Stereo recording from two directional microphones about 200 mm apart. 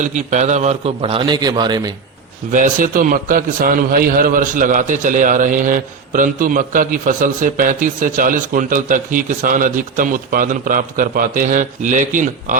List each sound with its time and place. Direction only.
0.0 s a man's voice: 35° right (ahead or behind); by 1.9 s 20° right (ahead or behind)
2.5 s a man's voice: 40° right (ahead or behind)